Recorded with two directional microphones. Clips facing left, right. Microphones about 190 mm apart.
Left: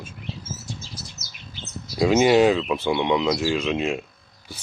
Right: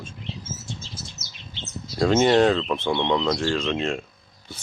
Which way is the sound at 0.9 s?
25° right (ahead or behind).